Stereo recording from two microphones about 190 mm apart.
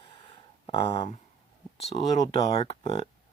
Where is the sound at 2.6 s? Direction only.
30° left (ahead or behind).